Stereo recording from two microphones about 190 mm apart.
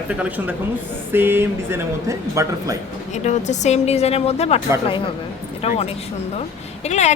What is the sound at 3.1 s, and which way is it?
A woman's voice, 40° left (ahead or behind).